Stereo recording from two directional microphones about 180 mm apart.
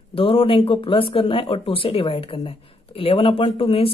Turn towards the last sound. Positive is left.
turn(degrees=30)  # may be behind; listen again after turning